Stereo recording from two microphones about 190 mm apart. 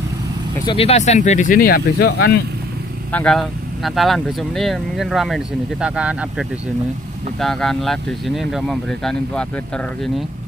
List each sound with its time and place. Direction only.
0.7 s speech: 30° left (ahead or behind); by 2.4 s 60° left (ahead or behind)
3.1 s speech: 5° left (ahead or behind)
7.3 s speech: centre (ahead or behind)